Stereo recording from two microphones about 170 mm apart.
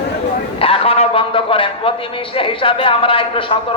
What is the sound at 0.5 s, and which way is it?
A man's voice, 35° left (ahead or behind).